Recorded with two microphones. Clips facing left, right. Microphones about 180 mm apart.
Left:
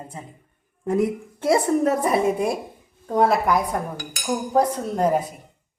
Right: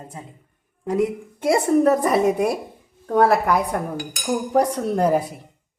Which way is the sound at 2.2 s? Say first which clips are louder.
Right 2 dB; 65° right (ahead or behind).